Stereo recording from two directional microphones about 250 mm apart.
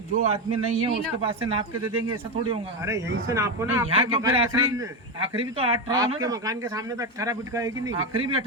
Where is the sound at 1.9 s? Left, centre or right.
Right.